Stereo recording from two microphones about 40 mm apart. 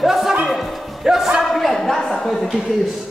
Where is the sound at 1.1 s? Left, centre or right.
Centre.